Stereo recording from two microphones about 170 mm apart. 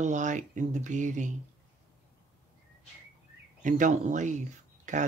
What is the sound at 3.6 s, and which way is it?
Speech, 50° right (ahead or behind).